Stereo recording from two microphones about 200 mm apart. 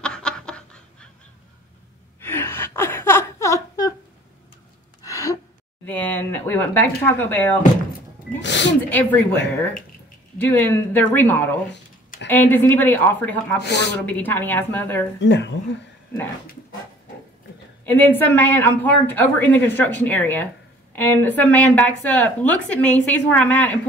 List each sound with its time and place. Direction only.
0.0 s snicker: 5° left (ahead or behind)
2.1 s a sound: 10° left (ahead or behind)
5.0 s gasp: 15° left (ahead or behind)
5.9 s a sound: 10° left (ahead or behind)
8.4 s speech: 65° left (ahead or behind)
8.9 s speech: 10° left (ahead or behind)
10.4 s speech: 10° left (ahead or behind)
13.6 s speech: 55° left (ahead or behind)
14.0 s speech: 10° left (ahead or behind)
15.1 s speech: 60° left (ahead or behind)
17.8 s speech: 10° left (ahead or behind)